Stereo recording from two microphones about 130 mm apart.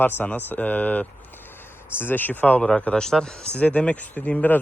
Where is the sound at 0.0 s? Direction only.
15° left (ahead or behind).